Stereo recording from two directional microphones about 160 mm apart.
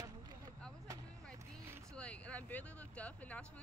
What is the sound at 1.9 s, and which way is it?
Vehicle, 5° left (ahead or behind).